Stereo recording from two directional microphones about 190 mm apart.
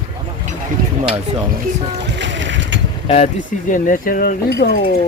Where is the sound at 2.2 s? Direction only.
70° right (ahead or behind).